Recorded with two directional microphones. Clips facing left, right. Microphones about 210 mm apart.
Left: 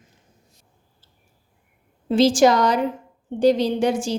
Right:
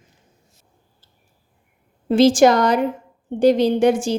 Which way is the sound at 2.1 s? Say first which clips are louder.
Right 3 dB; 55° right (ahead or behind).